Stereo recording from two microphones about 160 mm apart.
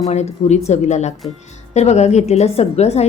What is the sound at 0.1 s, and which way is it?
A woman's voice, 45° left (ahead or behind).